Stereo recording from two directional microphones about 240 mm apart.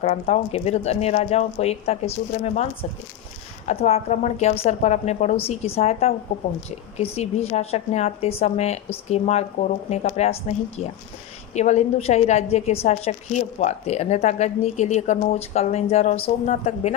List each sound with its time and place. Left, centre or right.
0.0 s a woman's voice: left
3.7 s a woman's voice: left
11.5 s a woman's voice: left